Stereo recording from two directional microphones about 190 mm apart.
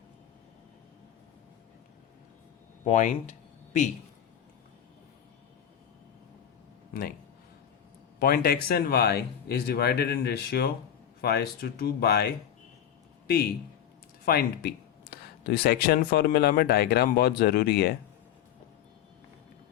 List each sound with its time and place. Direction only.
2.8 s speech: 40° left (ahead or behind)
8.2 s speech: 55° left (ahead or behind)